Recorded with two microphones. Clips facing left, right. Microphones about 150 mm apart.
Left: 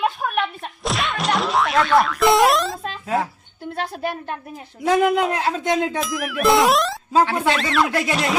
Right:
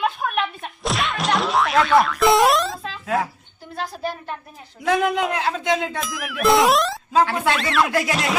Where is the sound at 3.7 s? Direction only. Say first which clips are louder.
Left 1 dB; 60° left (ahead or behind).